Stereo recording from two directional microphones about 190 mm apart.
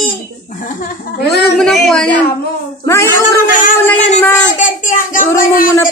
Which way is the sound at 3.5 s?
45° left (ahead or behind).